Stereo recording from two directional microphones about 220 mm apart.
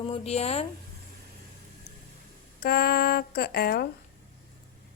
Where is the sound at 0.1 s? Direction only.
30° left (ahead or behind).